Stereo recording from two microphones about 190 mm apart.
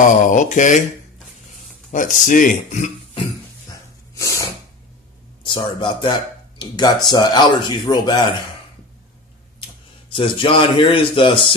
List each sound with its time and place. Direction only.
0.2 s speech: 40° left (ahead or behind)
1.9 s speech: 45° left (ahead or behind)
4.1 s a sound: 15° left (ahead or behind)
5.4 s a man's voice: 25° left (ahead or behind)
10.1 s speech: 30° left (ahead or behind)